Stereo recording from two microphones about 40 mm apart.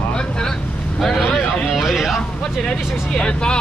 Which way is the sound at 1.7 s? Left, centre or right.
Centre.